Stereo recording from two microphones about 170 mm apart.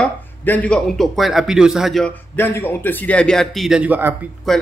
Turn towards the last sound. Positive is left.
turn(degrees=0)  # may be behind; listen again after turning